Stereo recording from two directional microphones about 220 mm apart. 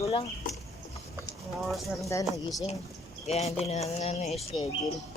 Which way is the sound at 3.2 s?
30° left (ahead or behind).